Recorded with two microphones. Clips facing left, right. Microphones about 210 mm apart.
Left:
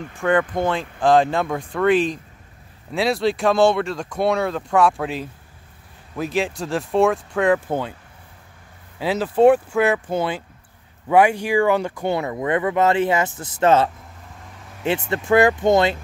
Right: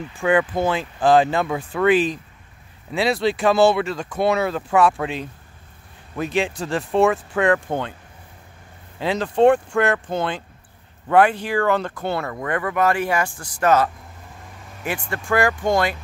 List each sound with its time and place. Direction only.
0.2 s speech: 10° right (ahead or behind)
9.0 s speech: 5° left (ahead or behind); by 16.0 s 20° left (ahead or behind)